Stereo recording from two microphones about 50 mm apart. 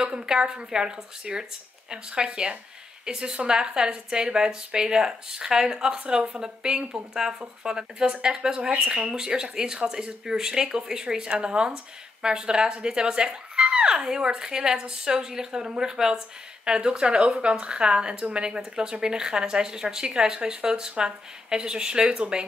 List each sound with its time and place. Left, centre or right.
0.0 s speech: centre